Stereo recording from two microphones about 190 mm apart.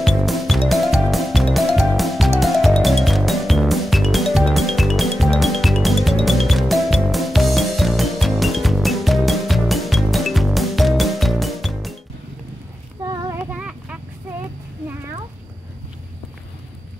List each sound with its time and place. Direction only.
0.0 s music: centre (ahead or behind)
13.0 s child singing: 20° right (ahead or behind)
13.4 s a sound: 5° right (ahead or behind)